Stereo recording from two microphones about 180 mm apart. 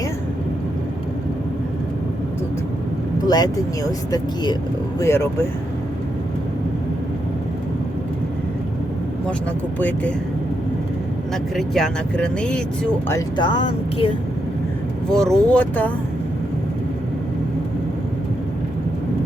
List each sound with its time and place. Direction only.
3.2 s speech: 20° left (ahead or behind)
4.9 s speech: 15° left (ahead or behind)
9.7 s speech: 10° left (ahead or behind)
11.5 s speech: centre (ahead or behind)
13.1 s speech: 25° left (ahead or behind)
15.1 s speech: 5° left (ahead or behind)